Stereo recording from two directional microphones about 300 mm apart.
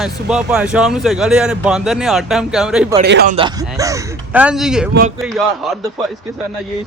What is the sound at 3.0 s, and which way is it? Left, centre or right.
Speech, right.